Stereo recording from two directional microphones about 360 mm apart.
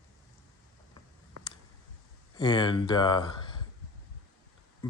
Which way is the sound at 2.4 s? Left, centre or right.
Centre.